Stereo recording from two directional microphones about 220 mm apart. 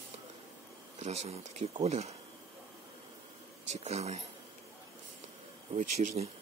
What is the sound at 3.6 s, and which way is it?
Speech, 30° right (ahead or behind).